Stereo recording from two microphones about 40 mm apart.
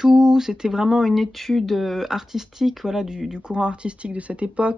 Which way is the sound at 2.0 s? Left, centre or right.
Centre.